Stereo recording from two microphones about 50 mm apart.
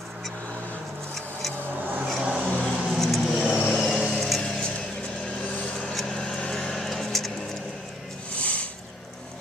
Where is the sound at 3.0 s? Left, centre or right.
Centre.